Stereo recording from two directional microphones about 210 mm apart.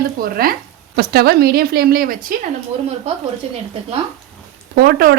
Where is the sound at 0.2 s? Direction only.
45° right (ahead or behind).